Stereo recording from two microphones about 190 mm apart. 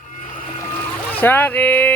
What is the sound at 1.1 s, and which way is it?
Speech, 10° left (ahead or behind).